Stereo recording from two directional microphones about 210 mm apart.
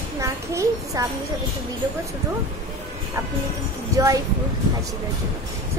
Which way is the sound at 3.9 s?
15° right (ahead or behind).